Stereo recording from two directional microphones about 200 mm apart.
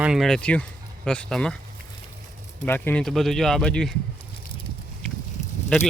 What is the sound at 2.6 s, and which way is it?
Speech, 10° left (ahead or behind).